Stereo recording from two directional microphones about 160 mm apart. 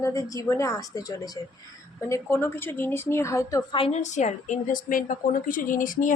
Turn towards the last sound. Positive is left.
turn(degrees=55)  # may be behind; listen again after turning